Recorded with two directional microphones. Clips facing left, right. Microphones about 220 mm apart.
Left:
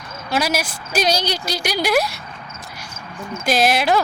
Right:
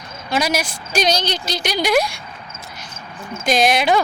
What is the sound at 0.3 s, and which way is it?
A woman's voice, 5° left (ahead or behind).